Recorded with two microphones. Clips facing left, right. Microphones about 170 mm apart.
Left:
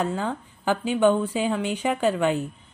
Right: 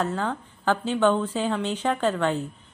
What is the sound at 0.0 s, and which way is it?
A woman's voice, 10° left (ahead or behind).